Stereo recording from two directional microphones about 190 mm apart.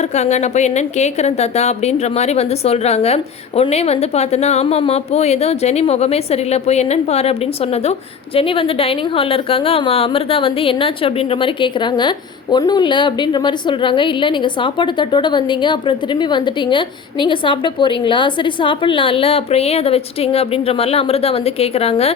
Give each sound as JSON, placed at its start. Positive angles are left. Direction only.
{"t": 0.0, "sound": "a woman's voice", "side_deg": 35}